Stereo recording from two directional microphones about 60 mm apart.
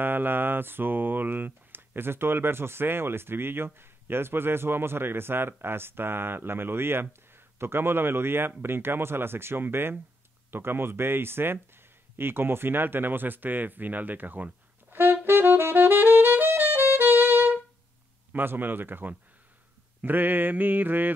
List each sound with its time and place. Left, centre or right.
0.0 s speech: right
15.2 s saxophone: right
18.3 s speech: right